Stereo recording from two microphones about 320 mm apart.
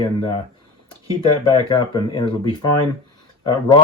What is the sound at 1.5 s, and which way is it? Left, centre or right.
Speech, centre.